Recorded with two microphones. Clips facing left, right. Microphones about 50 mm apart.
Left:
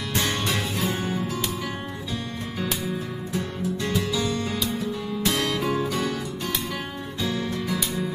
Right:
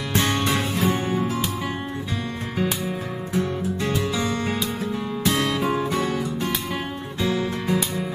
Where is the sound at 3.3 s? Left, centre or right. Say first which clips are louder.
Right 4 dB; right.